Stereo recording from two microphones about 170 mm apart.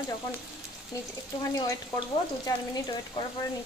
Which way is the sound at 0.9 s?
20° left (ahead or behind).